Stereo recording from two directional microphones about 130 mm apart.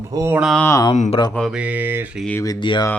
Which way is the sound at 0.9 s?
65° left (ahead or behind).